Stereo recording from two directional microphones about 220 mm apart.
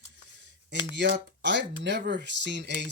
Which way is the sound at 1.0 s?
55° right (ahead or behind).